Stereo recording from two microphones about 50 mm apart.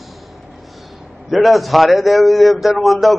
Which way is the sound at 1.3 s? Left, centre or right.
Centre.